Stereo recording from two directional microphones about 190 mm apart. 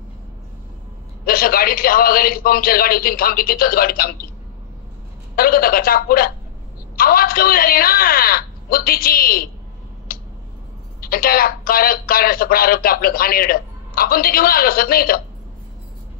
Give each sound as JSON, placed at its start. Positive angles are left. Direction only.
{"t": 1.2, "sound": "speech", "side_deg": 50}
{"t": 5.3, "sound": "speech", "side_deg": 50}
{"t": 10.1, "sound": "a sound", "side_deg": 50}
{"t": 11.0, "sound": "speech", "side_deg": 50}